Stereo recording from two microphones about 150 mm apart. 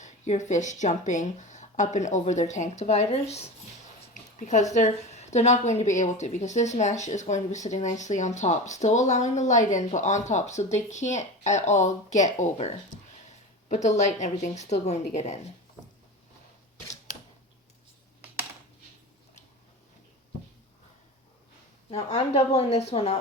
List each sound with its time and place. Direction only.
0.0 s a woman's voice: 55° left (ahead or behind)
4.1 s a sound: 55° left (ahead or behind)
4.7 s a woman's voice: 50° left (ahead or behind)
21.8 s a woman's voice: 45° left (ahead or behind)